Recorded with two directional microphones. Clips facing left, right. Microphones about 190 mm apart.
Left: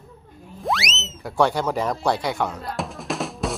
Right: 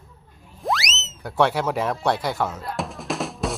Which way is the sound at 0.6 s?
Centre (ahead or behind).